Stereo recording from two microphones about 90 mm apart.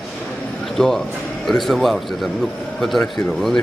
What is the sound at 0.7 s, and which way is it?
A man's voice, 5° left (ahead or behind).